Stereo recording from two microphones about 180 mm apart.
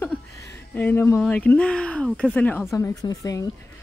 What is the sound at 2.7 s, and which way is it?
Speech, 20° left (ahead or behind).